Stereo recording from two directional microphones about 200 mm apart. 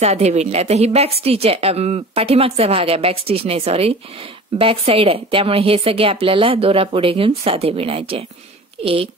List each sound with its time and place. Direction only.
0.0 s a woman's voice: 35° right (ahead or behind)